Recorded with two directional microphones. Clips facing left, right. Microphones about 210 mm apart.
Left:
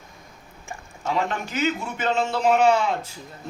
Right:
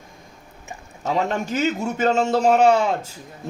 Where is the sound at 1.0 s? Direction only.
40° right (ahead or behind).